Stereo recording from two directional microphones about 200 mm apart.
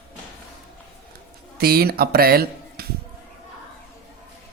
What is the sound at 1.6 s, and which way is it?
Speech, 50° right (ahead or behind).